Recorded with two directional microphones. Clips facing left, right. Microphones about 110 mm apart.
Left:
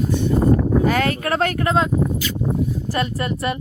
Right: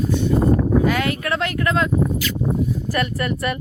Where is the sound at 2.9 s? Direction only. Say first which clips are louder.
Even; 25° left (ahead or behind).